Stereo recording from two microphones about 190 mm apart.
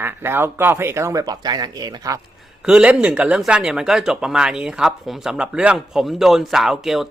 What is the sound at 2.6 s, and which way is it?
Speech, 5° right (ahead or behind).